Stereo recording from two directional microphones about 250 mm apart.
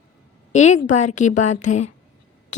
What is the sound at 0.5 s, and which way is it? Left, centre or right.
Speech, left.